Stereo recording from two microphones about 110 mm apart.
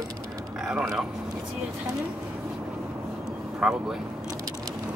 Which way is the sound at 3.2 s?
5° right (ahead or behind).